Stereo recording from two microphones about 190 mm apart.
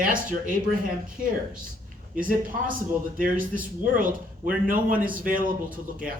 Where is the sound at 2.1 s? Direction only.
45° right (ahead or behind).